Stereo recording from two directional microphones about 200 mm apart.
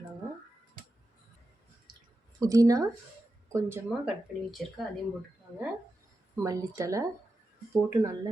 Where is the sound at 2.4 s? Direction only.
15° right (ahead or behind).